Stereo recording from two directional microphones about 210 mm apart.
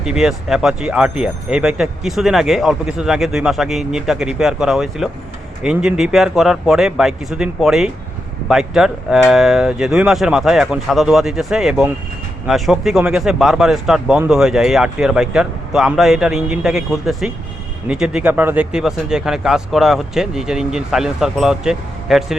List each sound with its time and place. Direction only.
0.0 s speech: centre (ahead or behind)